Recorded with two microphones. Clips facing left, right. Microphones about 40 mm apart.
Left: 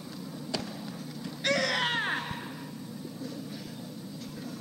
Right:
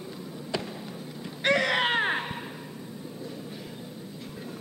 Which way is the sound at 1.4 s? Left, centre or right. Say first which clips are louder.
Right 4 dB; right.